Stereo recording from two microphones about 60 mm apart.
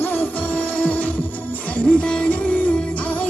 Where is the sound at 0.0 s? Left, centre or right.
Left.